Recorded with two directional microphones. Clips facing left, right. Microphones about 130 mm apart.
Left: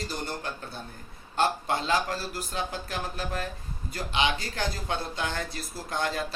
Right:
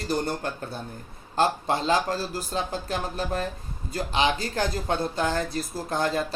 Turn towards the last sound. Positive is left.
turn(degrees=-35)  # may be behind; listen again after turning